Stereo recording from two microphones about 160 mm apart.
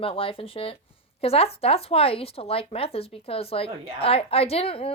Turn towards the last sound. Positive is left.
turn(degrees=35)  # may be behind; listen again after turning